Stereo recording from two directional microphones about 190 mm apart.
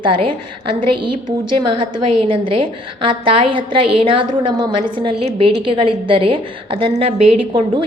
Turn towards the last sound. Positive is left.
turn(degrees=-30)  # may be behind; listen again after turning